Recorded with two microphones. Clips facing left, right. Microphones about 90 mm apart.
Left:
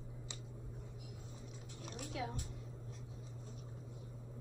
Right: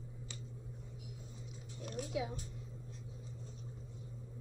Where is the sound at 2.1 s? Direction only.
15° right (ahead or behind).